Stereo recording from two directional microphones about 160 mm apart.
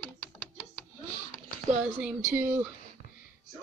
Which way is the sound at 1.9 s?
10° right (ahead or behind).